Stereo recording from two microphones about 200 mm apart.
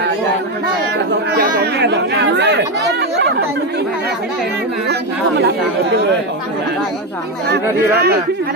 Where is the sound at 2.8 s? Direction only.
60° right (ahead or behind).